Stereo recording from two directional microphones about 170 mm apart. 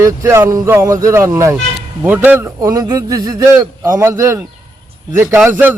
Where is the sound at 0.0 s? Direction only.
15° right (ahead or behind).